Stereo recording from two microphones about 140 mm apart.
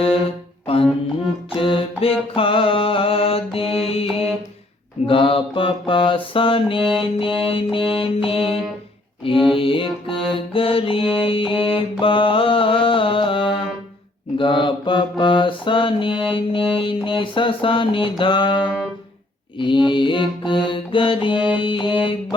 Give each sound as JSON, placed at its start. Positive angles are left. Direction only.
{"t": 1.5, "sound": "music", "side_deg": 35}
{"t": 5.0, "sound": "mantra", "side_deg": 40}
{"t": 7.0, "sound": "a sound", "side_deg": 40}
{"t": 7.4, "sound": "music", "side_deg": 40}
{"t": 14.3, "sound": "mantra", "side_deg": 35}
{"t": 16.3, "sound": "a sound", "side_deg": 35}
{"t": 19.5, "sound": "mantra", "side_deg": 35}
{"t": 21.6, "sound": "music", "side_deg": 35}